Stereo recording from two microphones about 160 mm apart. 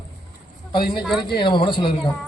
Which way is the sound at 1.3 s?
30° left (ahead or behind).